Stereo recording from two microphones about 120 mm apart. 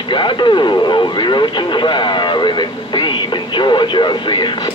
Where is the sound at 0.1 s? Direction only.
40° left (ahead or behind).